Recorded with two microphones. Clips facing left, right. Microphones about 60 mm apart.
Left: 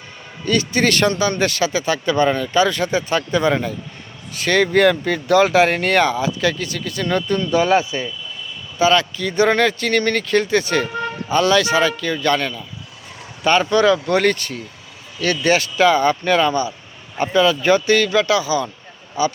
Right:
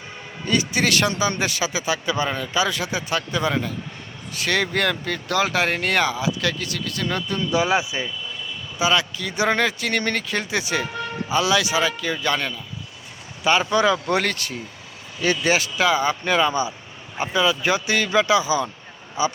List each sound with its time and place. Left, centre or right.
0.4 s speech: centre